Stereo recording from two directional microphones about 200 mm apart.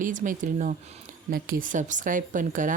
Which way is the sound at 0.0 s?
40° right (ahead or behind).